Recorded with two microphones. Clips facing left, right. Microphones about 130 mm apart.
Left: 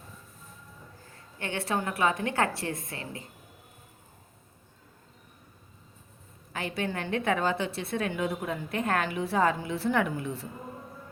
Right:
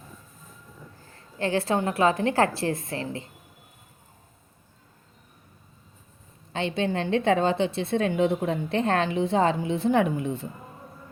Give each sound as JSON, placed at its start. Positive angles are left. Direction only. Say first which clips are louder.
{"t": 1.5, "sound": "a woman's voice", "louder": "right 5 dB", "side_deg": -25}
{"t": 6.5, "sound": "a woman's voice", "louder": "right 6 dB", "side_deg": -25}